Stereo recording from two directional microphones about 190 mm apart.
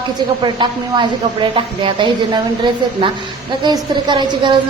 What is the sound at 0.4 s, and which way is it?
Speech, 25° right (ahead or behind).